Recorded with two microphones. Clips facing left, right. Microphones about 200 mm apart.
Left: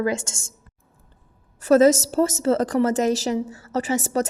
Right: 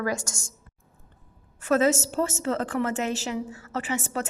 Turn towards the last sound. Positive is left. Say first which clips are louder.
# left 7 dB
turn(degrees=40)  # may be behind; listen again after turning